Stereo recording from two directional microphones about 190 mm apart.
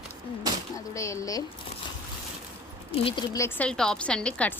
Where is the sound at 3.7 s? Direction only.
5° left (ahead or behind).